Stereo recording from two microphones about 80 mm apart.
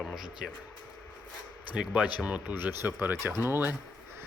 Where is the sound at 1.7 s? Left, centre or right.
Centre.